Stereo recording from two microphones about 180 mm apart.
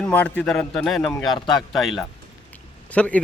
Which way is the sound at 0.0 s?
5° left (ahead or behind).